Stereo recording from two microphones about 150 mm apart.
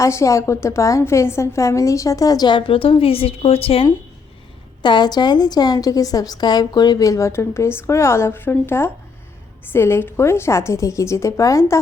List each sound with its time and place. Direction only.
0.0 s a woman's voice: 20° left (ahead or behind)